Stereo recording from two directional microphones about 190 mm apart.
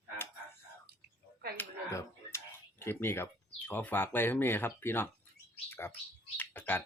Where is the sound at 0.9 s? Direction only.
55° right (ahead or behind).